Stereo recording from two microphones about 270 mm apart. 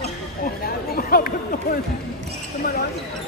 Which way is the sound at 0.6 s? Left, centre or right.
Left.